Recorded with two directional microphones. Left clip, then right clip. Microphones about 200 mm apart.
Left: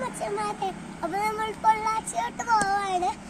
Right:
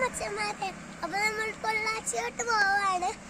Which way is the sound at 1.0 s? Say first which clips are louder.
Left 2 dB; 20° right (ahead or behind).